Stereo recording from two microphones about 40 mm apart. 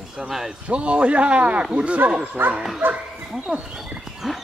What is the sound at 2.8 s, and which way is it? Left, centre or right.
Speech, right.